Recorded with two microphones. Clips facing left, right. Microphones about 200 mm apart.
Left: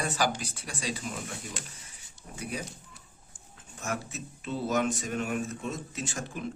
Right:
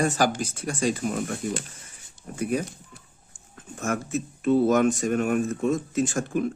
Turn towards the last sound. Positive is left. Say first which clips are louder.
# right 12 dB
turn(degrees=-50)  # may be behind; listen again after turning